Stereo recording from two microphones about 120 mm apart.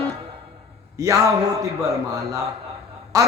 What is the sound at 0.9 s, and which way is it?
Speech, 30° right (ahead or behind).